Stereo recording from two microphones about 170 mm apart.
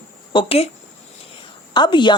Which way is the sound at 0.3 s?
35° left (ahead or behind).